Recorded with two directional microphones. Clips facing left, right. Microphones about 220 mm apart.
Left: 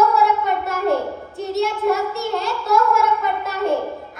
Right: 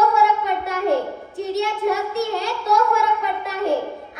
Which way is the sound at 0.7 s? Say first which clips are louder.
Right 1 dB; centre (ahead or behind).